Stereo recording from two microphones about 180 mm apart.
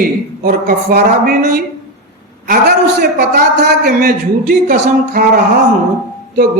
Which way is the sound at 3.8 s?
55° right (ahead or behind).